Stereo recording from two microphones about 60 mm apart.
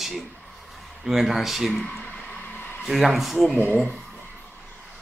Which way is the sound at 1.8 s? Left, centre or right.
Centre.